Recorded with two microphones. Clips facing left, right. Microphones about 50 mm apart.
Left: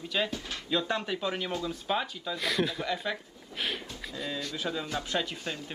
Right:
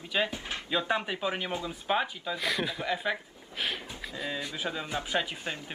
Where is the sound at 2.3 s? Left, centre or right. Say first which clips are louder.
Left 2 dB; centre.